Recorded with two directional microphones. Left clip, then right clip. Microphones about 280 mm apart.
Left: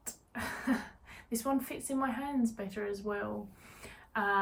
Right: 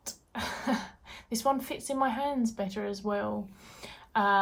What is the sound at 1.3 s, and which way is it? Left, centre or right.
Speech, centre.